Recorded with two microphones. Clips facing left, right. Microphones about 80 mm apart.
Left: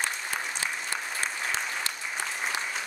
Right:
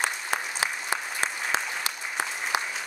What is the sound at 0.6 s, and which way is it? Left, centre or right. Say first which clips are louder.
Applause: right 5 dB; right.